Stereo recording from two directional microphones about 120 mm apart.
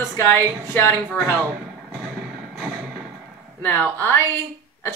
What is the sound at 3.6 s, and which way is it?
Speech, 15° left (ahead or behind).